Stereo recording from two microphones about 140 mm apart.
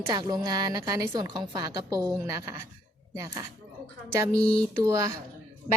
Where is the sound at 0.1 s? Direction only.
30° right (ahead or behind).